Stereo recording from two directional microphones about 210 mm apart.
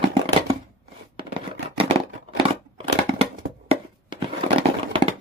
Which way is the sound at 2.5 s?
25° right (ahead or behind).